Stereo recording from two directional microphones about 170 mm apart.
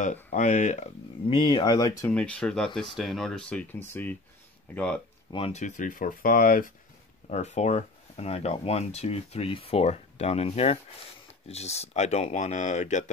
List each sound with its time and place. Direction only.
0.0 s speech: 45° left (ahead or behind)
1.3 s speech: 25° left (ahead or behind)
2.0 s speech: 5° left (ahead or behind)
5.3 s speech: 40° left (ahead or behind)
7.2 s speech: 40° left (ahead or behind)